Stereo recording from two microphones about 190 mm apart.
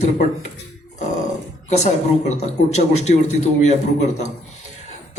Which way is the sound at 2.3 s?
35° left (ahead or behind).